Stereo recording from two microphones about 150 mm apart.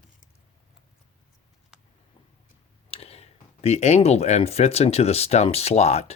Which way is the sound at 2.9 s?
40° left (ahead or behind).